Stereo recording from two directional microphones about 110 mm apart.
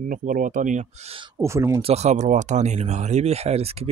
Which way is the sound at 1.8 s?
70° right (ahead or behind).